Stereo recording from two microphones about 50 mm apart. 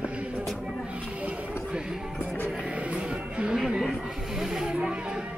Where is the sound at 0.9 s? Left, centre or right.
Right.